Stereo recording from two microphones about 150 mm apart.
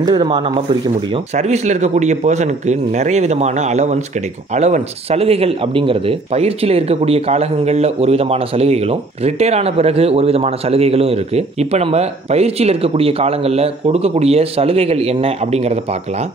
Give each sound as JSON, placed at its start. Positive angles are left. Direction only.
{"t": 0.0, "sound": "speech", "side_deg": -30}
{"t": 1.1, "sound": "speech", "side_deg": -45}